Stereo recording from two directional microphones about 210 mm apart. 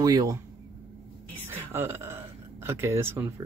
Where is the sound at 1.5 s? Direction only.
10° right (ahead or behind).